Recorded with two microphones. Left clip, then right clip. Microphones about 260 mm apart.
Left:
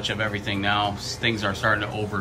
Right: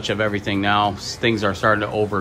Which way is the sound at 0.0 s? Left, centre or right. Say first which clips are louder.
Right 5 dB; right.